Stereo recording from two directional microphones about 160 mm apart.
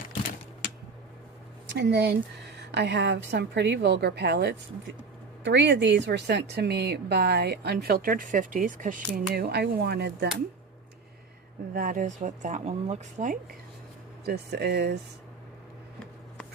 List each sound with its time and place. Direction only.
1.7 s speech: 90° right; by 9.0 s 55° right (ahead or behind)
9.1 s speech: 75° right (ahead or behind); by 10.2 s 90° right
11.7 s speech: 60° right (ahead or behind)
14.3 s speech: 90° right